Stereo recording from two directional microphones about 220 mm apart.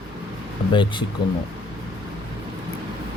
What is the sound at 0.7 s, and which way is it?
Speech, 20° left (ahead or behind).